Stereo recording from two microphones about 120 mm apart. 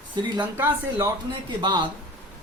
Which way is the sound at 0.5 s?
20° right (ahead or behind).